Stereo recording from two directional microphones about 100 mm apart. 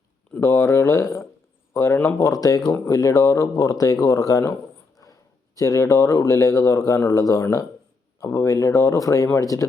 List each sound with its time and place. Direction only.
0.3 s speech: 30° left (ahead or behind)
5.5 s speech: 35° left (ahead or behind)